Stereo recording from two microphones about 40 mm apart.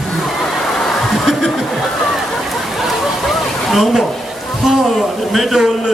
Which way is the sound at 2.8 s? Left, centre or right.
Centre.